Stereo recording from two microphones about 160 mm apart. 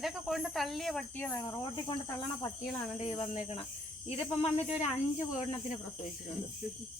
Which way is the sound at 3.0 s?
40° left (ahead or behind).